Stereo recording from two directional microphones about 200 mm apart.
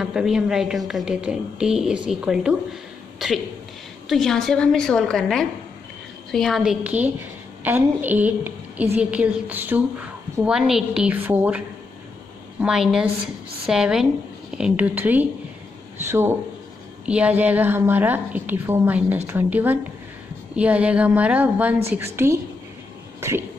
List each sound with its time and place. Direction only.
0.0 s a woman's voice: 5° right (ahead or behind)